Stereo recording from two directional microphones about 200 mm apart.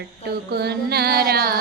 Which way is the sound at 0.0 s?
55° right (ahead or behind).